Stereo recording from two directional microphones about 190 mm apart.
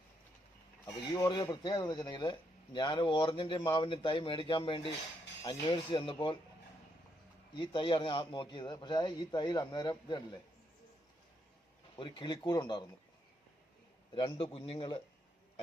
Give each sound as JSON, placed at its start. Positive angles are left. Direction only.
{"t": 0.9, "sound": "speech", "side_deg": 20}
{"t": 7.5, "sound": "speech", "side_deg": 25}
{"t": 11.9, "sound": "speech", "side_deg": 25}
{"t": 14.2, "sound": "speech", "side_deg": 25}